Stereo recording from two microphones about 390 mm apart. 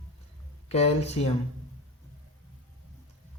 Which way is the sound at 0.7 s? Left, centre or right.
Centre.